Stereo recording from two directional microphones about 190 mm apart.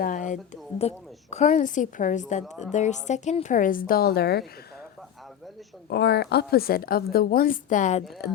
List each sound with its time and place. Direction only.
0.0 s a woman's voice: 40° left (ahead or behind)
5.9 s a woman's voice: 60° left (ahead or behind); by 8.0 s 40° left (ahead or behind)